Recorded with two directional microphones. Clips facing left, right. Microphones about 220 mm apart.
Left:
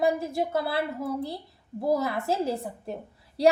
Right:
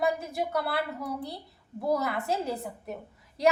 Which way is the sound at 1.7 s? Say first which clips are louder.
Left 3 dB; 25° left (ahead or behind).